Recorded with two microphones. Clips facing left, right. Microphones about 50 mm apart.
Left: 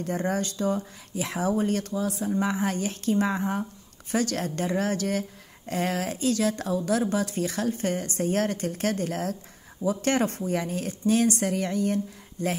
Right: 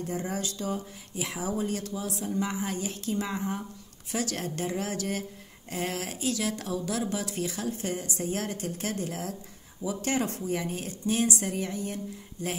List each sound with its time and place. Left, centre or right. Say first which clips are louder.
0.0 s speech: left 5 dB; left